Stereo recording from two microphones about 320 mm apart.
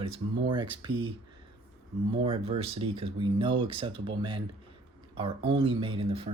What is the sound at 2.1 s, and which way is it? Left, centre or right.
Speech, centre.